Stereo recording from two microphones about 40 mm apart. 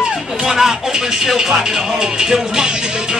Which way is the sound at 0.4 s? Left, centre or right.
Centre.